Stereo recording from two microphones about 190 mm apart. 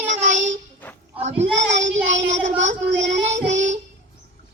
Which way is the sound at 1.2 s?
35° right (ahead or behind).